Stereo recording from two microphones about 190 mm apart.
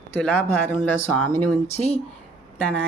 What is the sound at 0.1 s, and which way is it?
Speech, 10° left (ahead or behind).